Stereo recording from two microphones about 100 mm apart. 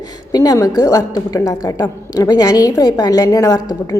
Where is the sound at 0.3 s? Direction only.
35° left (ahead or behind).